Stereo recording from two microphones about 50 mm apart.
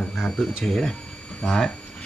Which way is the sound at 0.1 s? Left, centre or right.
Centre.